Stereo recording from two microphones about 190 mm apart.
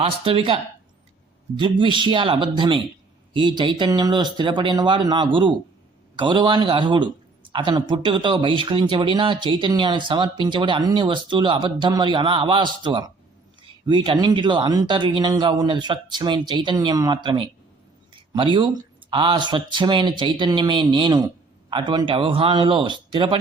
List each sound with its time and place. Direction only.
0.0 s speech: 30° right (ahead or behind)